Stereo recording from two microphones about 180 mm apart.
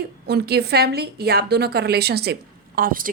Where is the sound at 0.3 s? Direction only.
65° right (ahead or behind).